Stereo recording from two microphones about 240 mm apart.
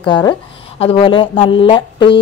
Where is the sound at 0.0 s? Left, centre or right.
Centre.